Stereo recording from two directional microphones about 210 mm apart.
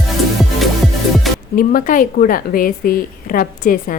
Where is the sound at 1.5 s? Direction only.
40° left (ahead or behind).